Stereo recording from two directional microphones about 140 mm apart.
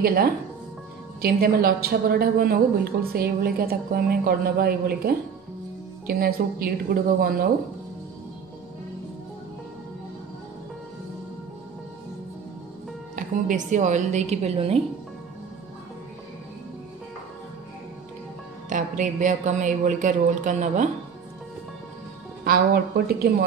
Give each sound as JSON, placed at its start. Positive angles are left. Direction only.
{"t": 0.0, "sound": "a woman's voice", "side_deg": -90}
{"t": 13.1, "sound": "a man's voice", "side_deg": -65}
{"t": 18.7, "sound": "a man's voice", "side_deg": -65}